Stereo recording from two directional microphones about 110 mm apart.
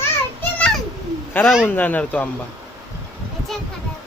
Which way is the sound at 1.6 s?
15° left (ahead or behind).